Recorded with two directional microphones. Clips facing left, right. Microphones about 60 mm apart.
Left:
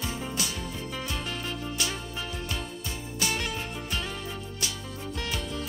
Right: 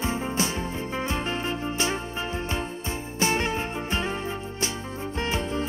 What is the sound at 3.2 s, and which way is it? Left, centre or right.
Music, right.